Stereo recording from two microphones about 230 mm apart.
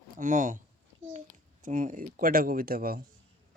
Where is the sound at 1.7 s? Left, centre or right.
Right.